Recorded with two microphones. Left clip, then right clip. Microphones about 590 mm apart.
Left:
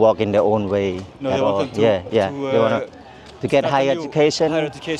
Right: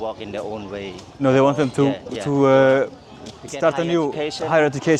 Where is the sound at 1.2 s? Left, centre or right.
Right.